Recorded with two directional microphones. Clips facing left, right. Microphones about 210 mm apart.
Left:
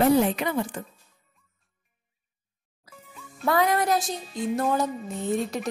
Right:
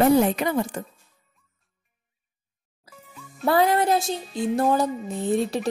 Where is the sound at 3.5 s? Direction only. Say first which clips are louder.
Right 3 dB; 30° right (ahead or behind).